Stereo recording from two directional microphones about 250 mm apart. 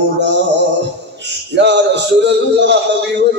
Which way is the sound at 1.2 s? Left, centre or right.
Right.